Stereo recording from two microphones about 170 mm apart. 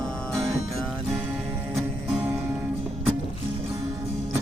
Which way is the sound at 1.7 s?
5° right (ahead or behind).